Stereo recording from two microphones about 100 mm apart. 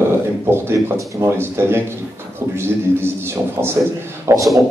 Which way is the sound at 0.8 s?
25° right (ahead or behind).